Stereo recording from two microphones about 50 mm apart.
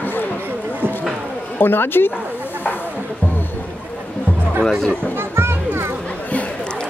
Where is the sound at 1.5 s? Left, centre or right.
Left.